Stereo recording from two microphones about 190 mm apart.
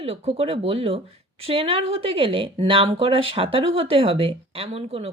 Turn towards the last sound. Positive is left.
turn(degrees=-30)  # may be behind; listen again after turning